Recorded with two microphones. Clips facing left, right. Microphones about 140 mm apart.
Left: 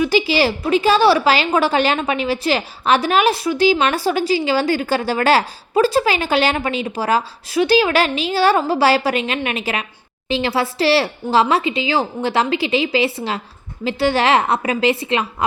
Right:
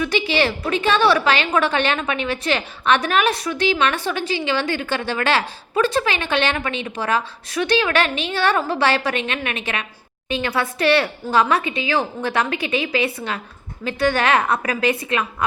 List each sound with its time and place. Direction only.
0.0 s a woman's voice: 35° left (ahead or behind)